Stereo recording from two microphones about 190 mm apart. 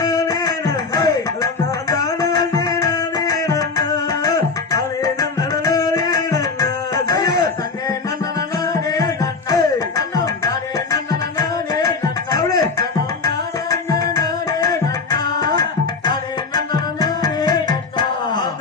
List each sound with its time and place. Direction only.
0.0 s music: 20° left (ahead or behind)
16.7 s music: 20° left (ahead or behind)